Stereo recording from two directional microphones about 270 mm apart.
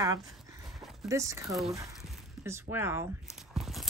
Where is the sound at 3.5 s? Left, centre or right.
Centre.